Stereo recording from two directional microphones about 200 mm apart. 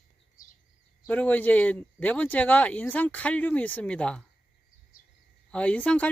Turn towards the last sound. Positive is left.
turn(degrees=5)  # may be behind; listen again after turning